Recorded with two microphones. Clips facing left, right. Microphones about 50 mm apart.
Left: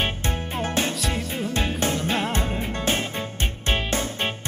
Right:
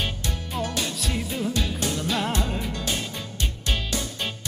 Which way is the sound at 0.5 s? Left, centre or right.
Left.